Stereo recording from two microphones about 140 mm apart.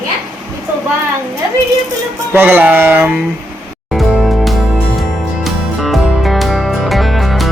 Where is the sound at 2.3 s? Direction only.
15° right (ahead or behind).